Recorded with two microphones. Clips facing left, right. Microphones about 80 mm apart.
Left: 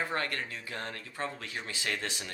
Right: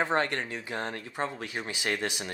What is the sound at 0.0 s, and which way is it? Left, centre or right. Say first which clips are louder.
Speech: right 6 dB; right.